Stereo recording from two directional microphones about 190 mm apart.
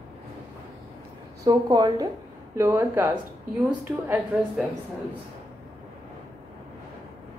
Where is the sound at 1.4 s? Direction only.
20° right (ahead or behind).